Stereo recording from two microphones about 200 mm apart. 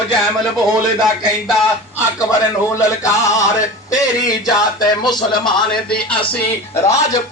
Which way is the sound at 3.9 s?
20° left (ahead or behind).